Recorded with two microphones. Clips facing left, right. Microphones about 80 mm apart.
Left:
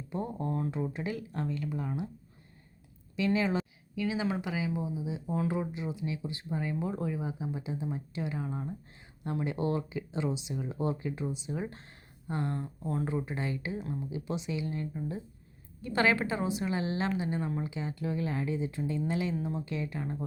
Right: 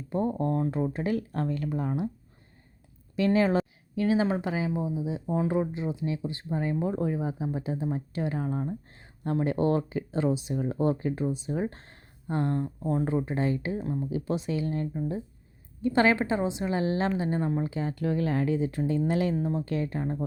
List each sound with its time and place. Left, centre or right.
0.1 s speech: right
1.0 s speech: right
3.2 s speech: right
5.4 s speech: right
12.6 s speech: right
14.0 s speech: right
15.8 s speech: right
19.4 s speech: right
20.0 s speech: right